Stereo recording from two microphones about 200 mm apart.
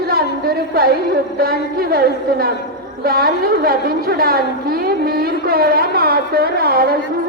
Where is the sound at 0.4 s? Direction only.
50° right (ahead or behind).